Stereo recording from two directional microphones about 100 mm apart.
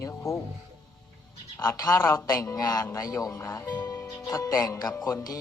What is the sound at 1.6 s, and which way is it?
Speech, 40° left (ahead or behind).